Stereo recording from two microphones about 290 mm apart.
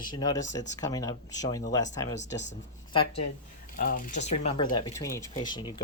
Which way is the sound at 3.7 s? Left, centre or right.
Left.